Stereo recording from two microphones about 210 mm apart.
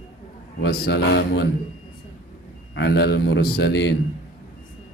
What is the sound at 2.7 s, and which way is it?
Speech, 55° left (ahead or behind).